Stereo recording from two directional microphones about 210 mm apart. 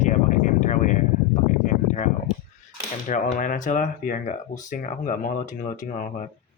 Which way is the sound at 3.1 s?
40° left (ahead or behind).